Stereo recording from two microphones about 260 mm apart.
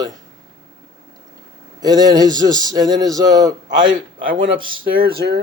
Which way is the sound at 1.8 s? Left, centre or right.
Centre.